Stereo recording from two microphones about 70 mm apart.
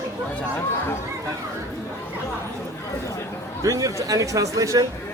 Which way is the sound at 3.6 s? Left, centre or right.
Right.